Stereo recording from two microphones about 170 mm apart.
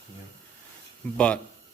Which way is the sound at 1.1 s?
5° left (ahead or behind).